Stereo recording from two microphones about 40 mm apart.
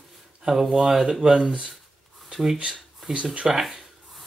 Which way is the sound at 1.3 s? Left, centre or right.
Right.